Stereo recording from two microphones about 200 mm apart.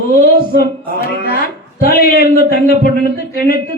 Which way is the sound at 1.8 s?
45° left (ahead or behind).